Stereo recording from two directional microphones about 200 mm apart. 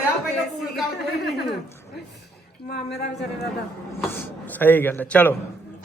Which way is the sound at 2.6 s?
55° left (ahead or behind).